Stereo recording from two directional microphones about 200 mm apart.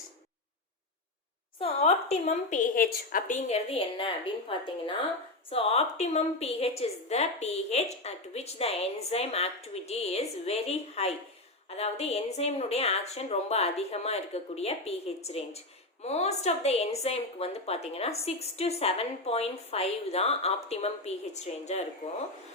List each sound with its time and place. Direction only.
1.5 s a woman's voice: 30° left (ahead or behind)
2.7 s a woman's voice: 45° left (ahead or behind)